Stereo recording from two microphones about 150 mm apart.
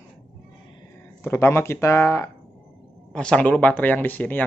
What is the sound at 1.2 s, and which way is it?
Speech, 15° left (ahead or behind).